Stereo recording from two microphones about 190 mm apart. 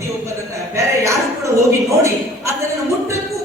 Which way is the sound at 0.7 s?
15° right (ahead or behind).